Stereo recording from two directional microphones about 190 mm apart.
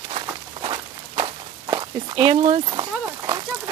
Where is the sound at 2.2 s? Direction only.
30° right (ahead or behind).